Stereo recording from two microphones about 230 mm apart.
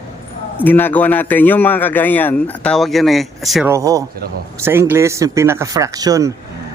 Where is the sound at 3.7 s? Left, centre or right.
Centre.